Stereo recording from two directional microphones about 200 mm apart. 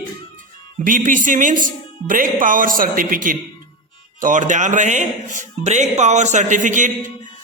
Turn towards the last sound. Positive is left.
turn(degrees=-40)  # may be behind; listen again after turning